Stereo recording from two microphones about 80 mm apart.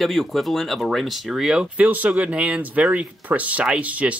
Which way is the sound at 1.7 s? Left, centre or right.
Right.